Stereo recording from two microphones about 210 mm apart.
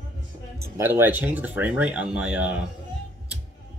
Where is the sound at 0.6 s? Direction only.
10° right (ahead or behind).